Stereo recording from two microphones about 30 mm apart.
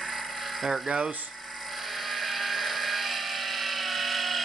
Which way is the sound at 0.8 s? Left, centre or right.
Right.